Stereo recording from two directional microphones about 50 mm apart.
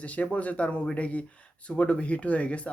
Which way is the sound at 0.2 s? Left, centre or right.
Left.